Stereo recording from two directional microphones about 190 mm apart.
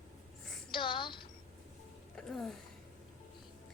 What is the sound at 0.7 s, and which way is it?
Speech, 25° left (ahead or behind).